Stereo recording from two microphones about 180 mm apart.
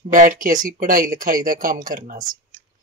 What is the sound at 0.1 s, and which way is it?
Speech, 50° right (ahead or behind).